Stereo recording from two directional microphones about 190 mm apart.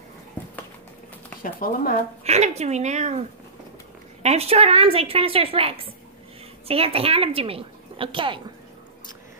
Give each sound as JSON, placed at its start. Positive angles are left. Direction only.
{"t": 1.4, "sound": "speech", "side_deg": 45}
{"t": 2.2, "sound": "a woman's voice", "side_deg": -35}
{"t": 4.2, "sound": "a woman's voice", "side_deg": -35}